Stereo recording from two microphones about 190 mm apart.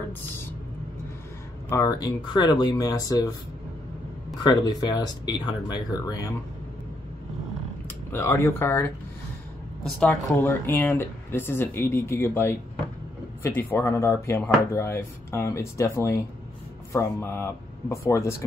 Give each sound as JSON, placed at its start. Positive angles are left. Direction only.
{"t": 1.7, "sound": "speech", "side_deg": 15}
{"t": 4.4, "sound": "speech", "side_deg": 20}
{"t": 8.1, "sound": "speech", "side_deg": 15}